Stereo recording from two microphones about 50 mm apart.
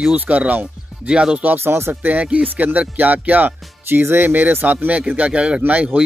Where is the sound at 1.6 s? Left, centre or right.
Right.